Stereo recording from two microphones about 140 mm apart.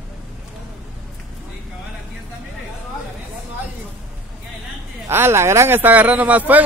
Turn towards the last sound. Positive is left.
turn(degrees=-10)  # may be behind; listen again after turning